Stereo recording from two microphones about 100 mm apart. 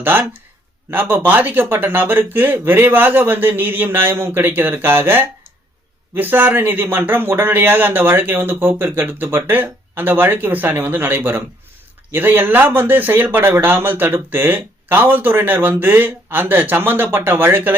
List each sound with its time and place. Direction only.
0.0 s speech: 20° right (ahead or behind)